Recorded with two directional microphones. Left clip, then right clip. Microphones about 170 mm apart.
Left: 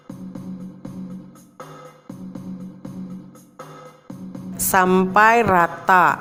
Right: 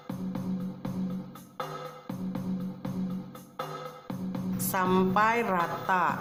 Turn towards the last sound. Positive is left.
turn(degrees=50)  # may be behind; listen again after turning